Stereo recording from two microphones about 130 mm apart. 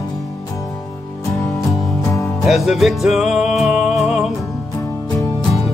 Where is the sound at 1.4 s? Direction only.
25° left (ahead or behind).